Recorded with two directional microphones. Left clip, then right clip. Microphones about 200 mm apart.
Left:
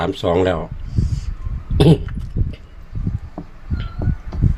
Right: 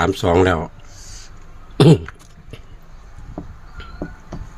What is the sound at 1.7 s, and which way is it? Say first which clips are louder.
Cough: right 2 dB; 35° right (ahead or behind).